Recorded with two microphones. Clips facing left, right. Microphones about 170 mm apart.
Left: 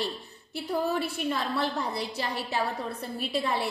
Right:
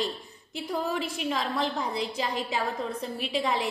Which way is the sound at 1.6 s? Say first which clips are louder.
Right 1 dB; 15° right (ahead or behind).